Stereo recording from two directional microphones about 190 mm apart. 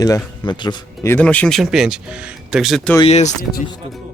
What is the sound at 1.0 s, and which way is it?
Speech, 10° left (ahead or behind).